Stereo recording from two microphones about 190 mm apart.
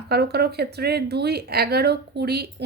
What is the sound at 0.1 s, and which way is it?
Speech, 60° right (ahead or behind).